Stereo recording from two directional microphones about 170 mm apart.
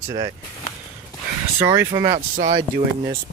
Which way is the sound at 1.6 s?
15° right (ahead or behind).